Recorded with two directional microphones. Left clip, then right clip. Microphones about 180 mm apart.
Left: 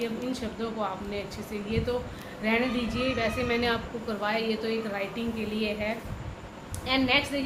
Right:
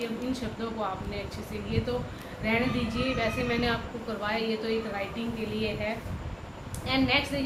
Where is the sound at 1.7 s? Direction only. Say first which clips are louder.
Left 2 dB; 50° left (ahead or behind).